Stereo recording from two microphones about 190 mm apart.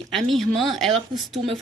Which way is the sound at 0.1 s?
Centre (ahead or behind).